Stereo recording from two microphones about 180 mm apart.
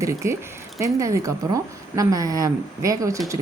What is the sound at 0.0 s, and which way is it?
A woman's voice, 15° right (ahead or behind).